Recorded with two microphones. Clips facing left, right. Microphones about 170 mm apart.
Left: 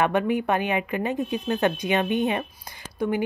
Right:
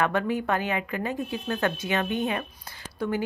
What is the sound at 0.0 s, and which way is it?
A woman's voice, 20° left (ahead or behind).